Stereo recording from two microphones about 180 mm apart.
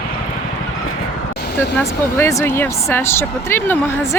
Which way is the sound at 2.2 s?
15° left (ahead or behind).